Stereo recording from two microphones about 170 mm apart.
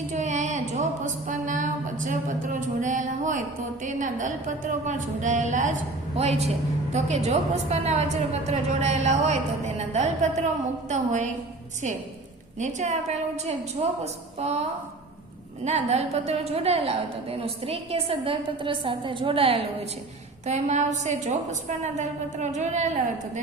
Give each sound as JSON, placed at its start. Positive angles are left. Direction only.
{"t": 0.1, "sound": "a woman's voice", "side_deg": -45}
{"t": 12.5, "sound": "a woman's voice", "side_deg": -45}
{"t": 15.6, "sound": "a woman's voice", "side_deg": -40}
{"t": 20.4, "sound": "a woman's voice", "side_deg": -45}